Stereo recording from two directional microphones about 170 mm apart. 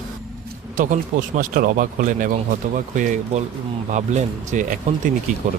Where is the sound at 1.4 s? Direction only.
55° right (ahead or behind).